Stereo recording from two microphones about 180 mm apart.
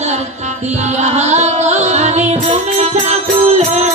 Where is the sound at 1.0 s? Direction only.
40° right (ahead or behind).